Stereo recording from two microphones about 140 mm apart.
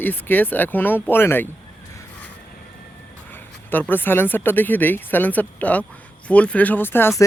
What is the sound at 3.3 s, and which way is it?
Speech, 15° left (ahead or behind).